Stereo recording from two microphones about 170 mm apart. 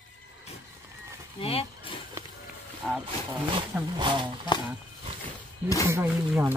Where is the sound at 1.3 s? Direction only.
35° left (ahead or behind).